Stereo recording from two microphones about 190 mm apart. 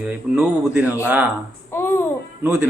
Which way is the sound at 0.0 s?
5° right (ahead or behind).